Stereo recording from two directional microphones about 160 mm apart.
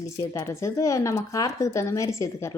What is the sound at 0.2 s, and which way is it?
Speech, 20° left (ahead or behind).